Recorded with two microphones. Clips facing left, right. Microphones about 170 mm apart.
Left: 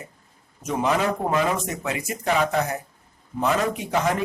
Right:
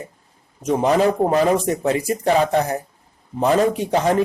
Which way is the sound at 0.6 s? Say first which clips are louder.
Right 6 dB; 35° right (ahead or behind).